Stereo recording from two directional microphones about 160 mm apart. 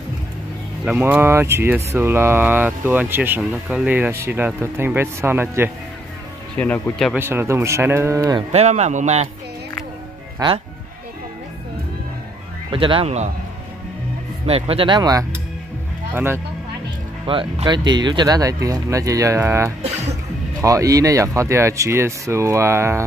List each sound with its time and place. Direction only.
0.8 s speech: 10° right (ahead or behind)
6.6 s speech: 5° left (ahead or behind)
7.2 s speech: 15° right (ahead or behind)
8.5 s speech: 45° right (ahead or behind)
10.4 s speech: 25° right (ahead or behind)
12.7 s speech: 35° right (ahead or behind)
14.4 s speech: 40° right (ahead or behind)
17.3 s speech: 30° right (ahead or behind); by 23.0 s 15° right (ahead or behind)